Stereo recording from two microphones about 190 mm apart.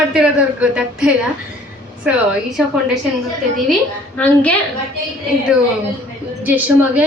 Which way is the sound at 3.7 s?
5° left (ahead or behind).